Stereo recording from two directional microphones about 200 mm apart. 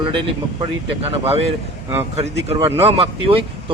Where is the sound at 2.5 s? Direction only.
30° right (ahead or behind).